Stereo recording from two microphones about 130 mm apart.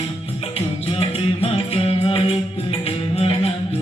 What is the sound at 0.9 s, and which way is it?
Music, 45° left (ahead or behind).